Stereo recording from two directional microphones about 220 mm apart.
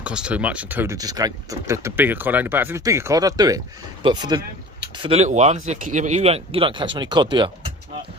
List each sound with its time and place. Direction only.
0.0 s speech: 5° right (ahead or behind); by 7.5 s 20° right (ahead or behind)